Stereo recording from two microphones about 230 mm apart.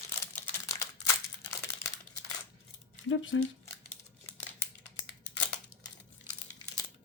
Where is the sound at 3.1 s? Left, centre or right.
Left.